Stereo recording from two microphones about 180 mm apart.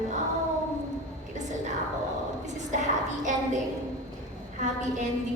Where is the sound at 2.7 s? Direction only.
45° right (ahead or behind).